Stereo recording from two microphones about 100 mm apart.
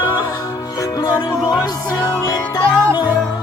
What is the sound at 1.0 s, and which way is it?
Music, 30° left (ahead or behind).